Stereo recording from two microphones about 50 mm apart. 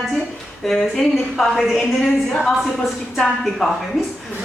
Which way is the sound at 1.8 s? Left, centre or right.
Centre.